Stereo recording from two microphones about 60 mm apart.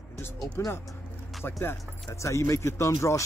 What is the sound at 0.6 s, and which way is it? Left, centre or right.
Speech, left.